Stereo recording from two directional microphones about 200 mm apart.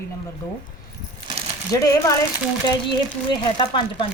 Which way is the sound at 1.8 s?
15° left (ahead or behind).